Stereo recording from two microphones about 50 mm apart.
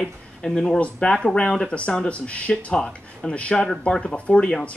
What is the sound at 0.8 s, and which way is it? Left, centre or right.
Speech, left.